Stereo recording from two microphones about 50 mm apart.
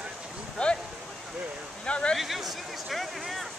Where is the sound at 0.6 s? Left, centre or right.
Centre.